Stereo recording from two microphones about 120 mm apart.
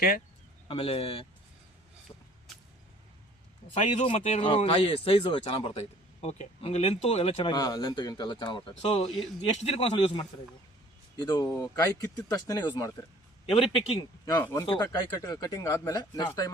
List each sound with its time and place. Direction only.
0.7 s speech: 50° left (ahead or behind)
2.1 s vehicle: 30° left (ahead or behind)
4.0 s speech: 55° left (ahead or behind)
7.5 s speech: 35° left (ahead or behind)
8.8 s a man's voice: 60° left (ahead or behind)
11.3 s speech: 30° left (ahead or behind)
13.5 s speech: 50° left (ahead or behind)
14.4 s speech: 25° left (ahead or behind)
14.7 s speech: 35° left (ahead or behind)